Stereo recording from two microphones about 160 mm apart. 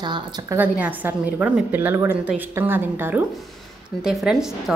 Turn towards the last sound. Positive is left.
turn(degrees=0)  # may be behind; listen again after turning